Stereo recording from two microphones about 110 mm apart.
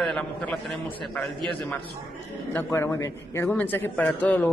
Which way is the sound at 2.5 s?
20° left (ahead or behind).